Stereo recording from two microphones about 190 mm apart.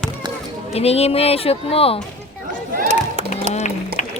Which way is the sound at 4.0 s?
40° left (ahead or behind).